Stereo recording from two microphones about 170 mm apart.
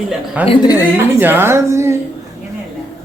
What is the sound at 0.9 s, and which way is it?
A woman's voice, 10° right (ahead or behind).